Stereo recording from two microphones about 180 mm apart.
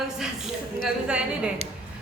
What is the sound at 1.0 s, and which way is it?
Speech, 5° right (ahead or behind).